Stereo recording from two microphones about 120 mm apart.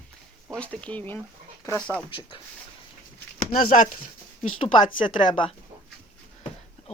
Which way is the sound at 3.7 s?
90° left.